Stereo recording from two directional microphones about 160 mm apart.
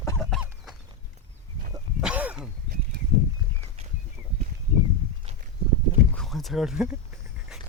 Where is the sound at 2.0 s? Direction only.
10° right (ahead or behind).